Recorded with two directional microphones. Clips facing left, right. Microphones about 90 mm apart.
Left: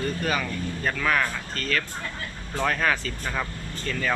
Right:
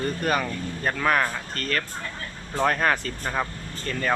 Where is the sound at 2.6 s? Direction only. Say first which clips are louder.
Right 3 dB; 20° right (ahead or behind).